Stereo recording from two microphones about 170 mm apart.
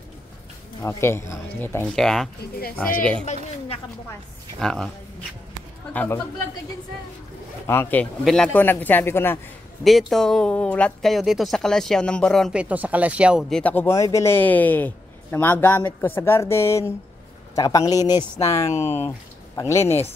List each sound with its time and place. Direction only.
0.8 s a woman's voice: 15° left (ahead or behind)
2.0 s a woman's voice: centre (ahead or behind)
4.6 s speech: centre (ahead or behind)
5.9 s a woman's voice: 15° left (ahead or behind)
7.6 s a woman's voice: 15° left (ahead or behind)
9.8 s a woman's voice: centre (ahead or behind)